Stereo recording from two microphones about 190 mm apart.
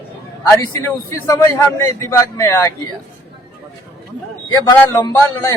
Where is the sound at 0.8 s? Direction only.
15° left (ahead or behind).